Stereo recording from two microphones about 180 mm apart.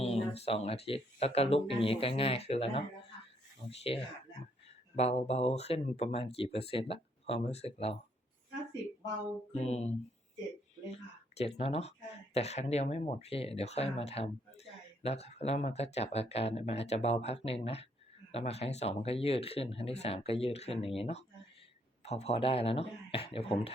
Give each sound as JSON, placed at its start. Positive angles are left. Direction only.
{"t": 0.0, "sound": "speech", "side_deg": 35}
{"t": 9.6, "sound": "speech", "side_deg": 35}
{"t": 11.3, "sound": "speech", "side_deg": 35}